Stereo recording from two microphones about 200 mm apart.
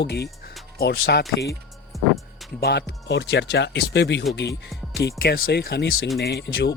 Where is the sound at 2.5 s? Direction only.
55° left (ahead or behind).